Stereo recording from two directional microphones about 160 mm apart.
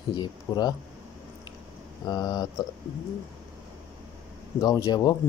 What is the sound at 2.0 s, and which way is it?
Speech, 25° left (ahead or behind).